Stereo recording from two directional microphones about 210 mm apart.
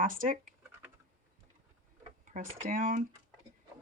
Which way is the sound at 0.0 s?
40° right (ahead or behind).